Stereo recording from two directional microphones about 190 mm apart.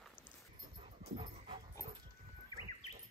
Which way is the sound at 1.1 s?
25° right (ahead or behind).